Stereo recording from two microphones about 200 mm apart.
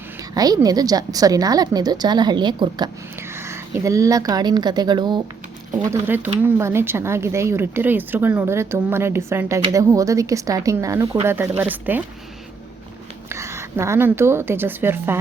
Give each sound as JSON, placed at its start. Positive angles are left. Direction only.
{"t": 0.2, "sound": "a woman's voice", "side_deg": -20}
{"t": 13.2, "sound": "a woman's voice", "side_deg": -15}